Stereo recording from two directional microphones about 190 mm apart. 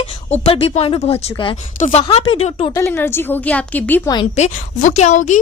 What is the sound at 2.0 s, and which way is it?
Speech, 30° left (ahead or behind).